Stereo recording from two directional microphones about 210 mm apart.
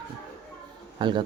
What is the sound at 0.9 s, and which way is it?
Speech, 20° right (ahead or behind).